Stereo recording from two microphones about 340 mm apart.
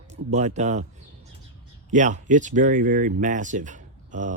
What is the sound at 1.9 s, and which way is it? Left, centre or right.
Speech, right.